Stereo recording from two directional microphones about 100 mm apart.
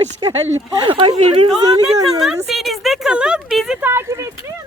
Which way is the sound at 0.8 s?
60° right (ahead or behind).